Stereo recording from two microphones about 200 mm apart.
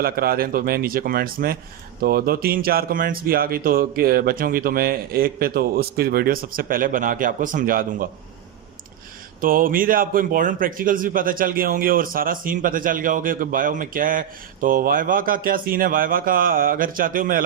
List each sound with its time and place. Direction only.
0.0 s a man's voice: 50° right (ahead or behind)
9.4 s a man's voice: 45° right (ahead or behind)